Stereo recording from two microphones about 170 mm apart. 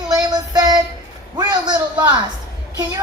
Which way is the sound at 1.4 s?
25° right (ahead or behind).